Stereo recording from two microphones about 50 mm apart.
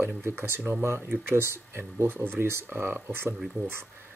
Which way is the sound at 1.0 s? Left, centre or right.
Right.